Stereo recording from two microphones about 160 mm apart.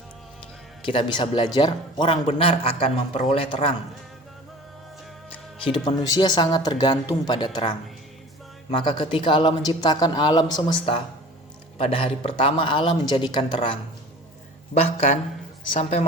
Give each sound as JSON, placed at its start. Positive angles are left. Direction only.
{"t": 0.9, "sound": "speech", "side_deg": 30}
{"t": 5.6, "sound": "speech", "side_deg": 30}
{"t": 14.8, "sound": "a woman's voice", "side_deg": 40}